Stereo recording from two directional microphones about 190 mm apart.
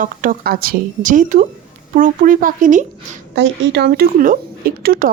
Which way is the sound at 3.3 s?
65° right (ahead or behind).